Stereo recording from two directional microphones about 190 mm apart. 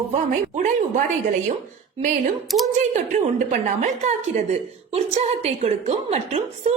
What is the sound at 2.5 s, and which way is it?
Speech, centre (ahead or behind).